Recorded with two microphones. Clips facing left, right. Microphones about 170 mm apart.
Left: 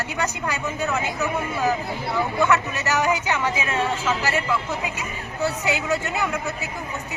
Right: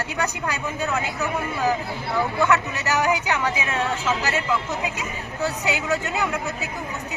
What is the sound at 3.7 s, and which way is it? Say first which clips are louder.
Speech: left 1 dB; 15° left (ahead or behind).